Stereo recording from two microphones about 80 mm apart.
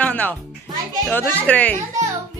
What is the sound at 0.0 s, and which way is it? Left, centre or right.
Music, centre.